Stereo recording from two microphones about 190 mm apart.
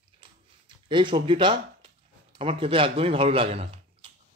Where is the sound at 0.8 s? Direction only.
25° right (ahead or behind).